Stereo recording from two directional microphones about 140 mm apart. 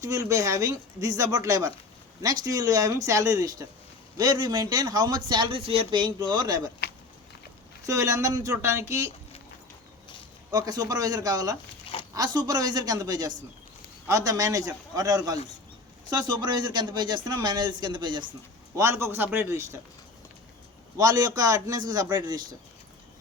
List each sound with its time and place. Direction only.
0.0 s speech: 25° right (ahead or behind)
7.9 s speech: 20° right (ahead or behind)
10.5 s speech: 25° right (ahead or behind)
18.8 s speech: 20° right (ahead or behind)
21.0 s speech: 25° right (ahead or behind)